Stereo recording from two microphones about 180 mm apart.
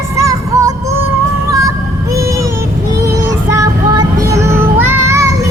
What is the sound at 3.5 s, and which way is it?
Child singing, 20° right (ahead or behind).